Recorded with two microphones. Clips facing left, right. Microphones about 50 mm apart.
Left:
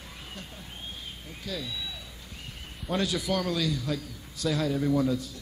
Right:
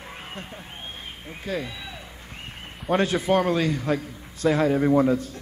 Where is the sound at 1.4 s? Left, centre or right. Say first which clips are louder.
Right 6 dB; right.